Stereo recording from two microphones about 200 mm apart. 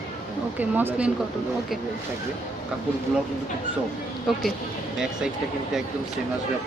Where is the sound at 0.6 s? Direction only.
10° right (ahead or behind).